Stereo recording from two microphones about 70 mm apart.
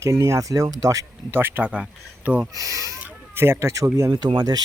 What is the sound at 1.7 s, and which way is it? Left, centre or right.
Speech, centre.